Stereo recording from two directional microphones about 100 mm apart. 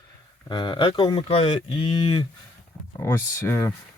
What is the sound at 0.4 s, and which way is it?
Speech, 50° left (ahead or behind).